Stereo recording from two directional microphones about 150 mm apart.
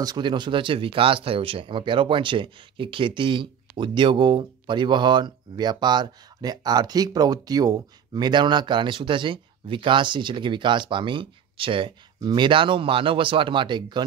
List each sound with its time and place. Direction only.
0.0 s speech: 30° right (ahead or behind)